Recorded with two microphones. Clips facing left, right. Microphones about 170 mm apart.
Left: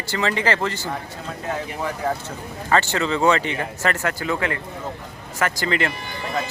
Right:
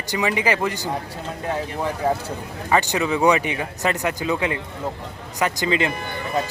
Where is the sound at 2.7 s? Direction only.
15° right (ahead or behind).